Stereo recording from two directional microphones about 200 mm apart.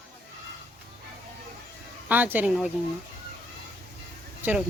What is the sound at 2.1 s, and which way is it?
Speech, 10° right (ahead or behind).